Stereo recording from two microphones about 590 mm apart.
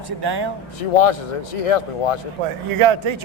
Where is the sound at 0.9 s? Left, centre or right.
Left.